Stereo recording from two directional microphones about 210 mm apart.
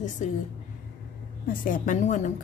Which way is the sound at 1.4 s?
40° left (ahead or behind).